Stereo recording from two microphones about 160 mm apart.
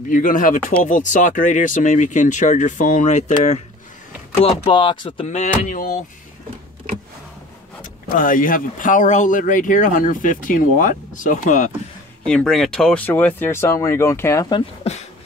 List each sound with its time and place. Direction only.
0.1 s speech: 55° left (ahead or behind)
4.4 s speech: 30° left (ahead or behind)
5.6 s speech: 55° left (ahead or behind)
7.8 s speech: 55° left (ahead or behind)
12.3 s speech: 5° left (ahead or behind); by 14.6 s 20° left (ahead or behind)